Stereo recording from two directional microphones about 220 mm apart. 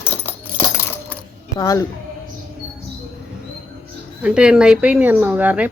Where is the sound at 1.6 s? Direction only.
15° left (ahead or behind).